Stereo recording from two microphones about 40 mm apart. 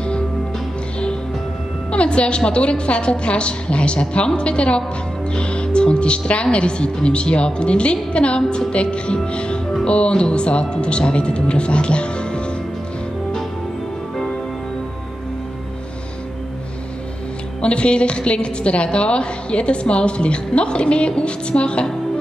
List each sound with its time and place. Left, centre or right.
1.9 s a woman's voice: left
17.6 s a woman's voice: left